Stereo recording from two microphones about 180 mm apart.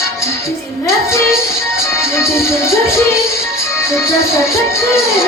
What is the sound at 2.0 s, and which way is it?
Music, 15° left (ahead or behind).